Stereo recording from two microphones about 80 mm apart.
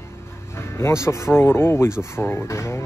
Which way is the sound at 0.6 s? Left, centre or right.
Left.